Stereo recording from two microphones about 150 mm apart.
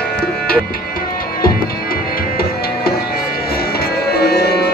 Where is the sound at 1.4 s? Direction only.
80° left.